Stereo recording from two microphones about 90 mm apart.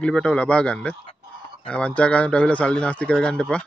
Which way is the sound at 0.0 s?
10° left (ahead or behind).